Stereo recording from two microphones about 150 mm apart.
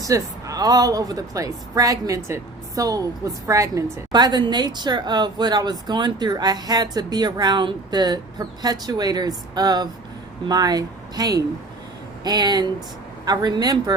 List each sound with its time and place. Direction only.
0.0 s speech: 20° right (ahead or behind)